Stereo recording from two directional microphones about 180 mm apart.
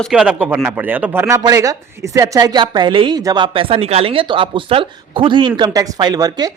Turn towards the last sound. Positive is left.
turn(degrees=-20)  # may be behind; listen again after turning